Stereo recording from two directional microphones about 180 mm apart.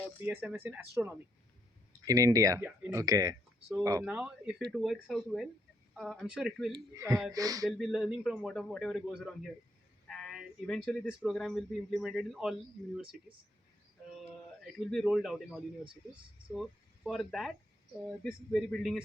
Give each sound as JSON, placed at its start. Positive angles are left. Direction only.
{"t": 0.3, "sound": "speech", "side_deg": -10}
{"t": 4.0, "sound": "a man's voice", "side_deg": -5}
{"t": 6.7, "sound": "speech", "side_deg": -20}
{"t": 7.6, "sound": "a man's voice", "side_deg": 0}
{"t": 14.6, "sound": "a man's voice", "side_deg": 0}